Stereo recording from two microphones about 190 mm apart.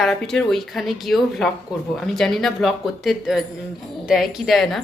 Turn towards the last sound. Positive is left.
turn(degrees=0)  # may be behind; listen again after turning